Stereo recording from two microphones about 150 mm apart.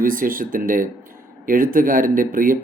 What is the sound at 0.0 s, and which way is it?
Speech, 65° right (ahead or behind).